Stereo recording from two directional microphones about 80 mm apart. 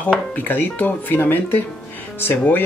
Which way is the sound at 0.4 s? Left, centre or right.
Left.